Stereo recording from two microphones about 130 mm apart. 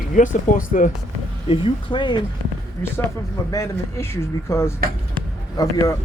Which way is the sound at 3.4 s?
25° left (ahead or behind).